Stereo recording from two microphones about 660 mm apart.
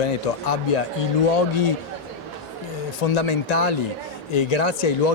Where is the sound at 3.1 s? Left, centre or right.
Left.